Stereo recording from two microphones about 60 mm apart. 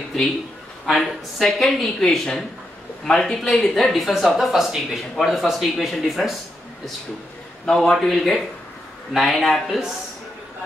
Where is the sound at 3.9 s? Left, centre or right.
Centre.